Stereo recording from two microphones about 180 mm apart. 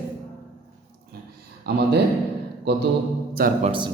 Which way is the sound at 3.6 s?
30° right (ahead or behind).